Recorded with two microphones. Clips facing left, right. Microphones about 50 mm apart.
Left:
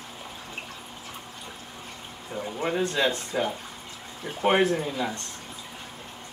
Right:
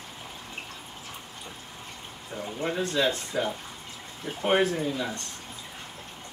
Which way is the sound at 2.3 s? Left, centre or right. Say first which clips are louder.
Left 2 dB; centre.